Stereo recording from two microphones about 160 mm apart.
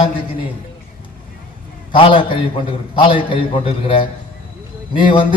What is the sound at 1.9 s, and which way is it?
A man's voice, 30° left (ahead or behind).